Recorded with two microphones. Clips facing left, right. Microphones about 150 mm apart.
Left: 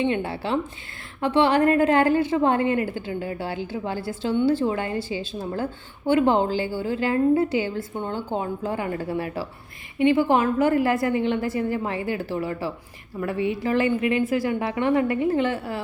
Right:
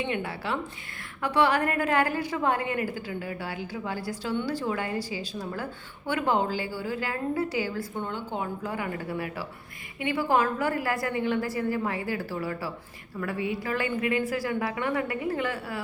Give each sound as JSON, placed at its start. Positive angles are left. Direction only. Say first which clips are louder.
{"t": 0.0, "sound": "a woman's voice", "louder": "left 6 dB", "side_deg": 25}